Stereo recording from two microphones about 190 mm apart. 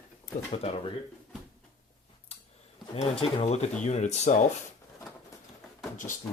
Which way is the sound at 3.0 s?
35° left (ahead or behind).